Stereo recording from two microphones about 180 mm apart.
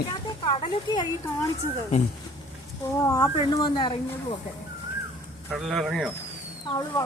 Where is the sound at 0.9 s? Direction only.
25° left (ahead or behind).